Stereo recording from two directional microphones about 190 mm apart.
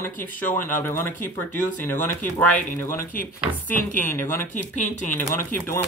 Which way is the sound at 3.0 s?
50° left (ahead or behind).